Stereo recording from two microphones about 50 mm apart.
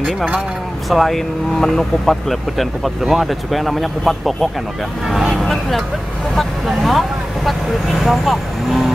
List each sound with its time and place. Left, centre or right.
0.8 s speech: centre